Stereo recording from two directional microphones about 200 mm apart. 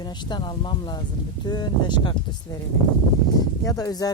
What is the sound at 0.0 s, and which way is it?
Speech, 20° left (ahead or behind).